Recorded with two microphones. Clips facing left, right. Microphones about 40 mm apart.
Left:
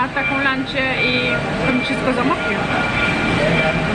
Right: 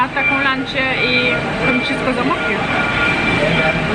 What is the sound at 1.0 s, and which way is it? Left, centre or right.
Speech, right.